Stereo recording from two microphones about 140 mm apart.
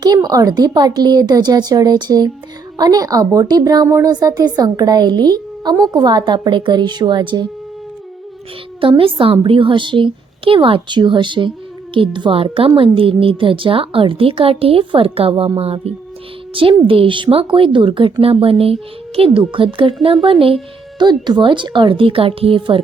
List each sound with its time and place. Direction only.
0.0 s a woman's voice: 30° right (ahead or behind)
8.8 s speech: 40° right (ahead or behind)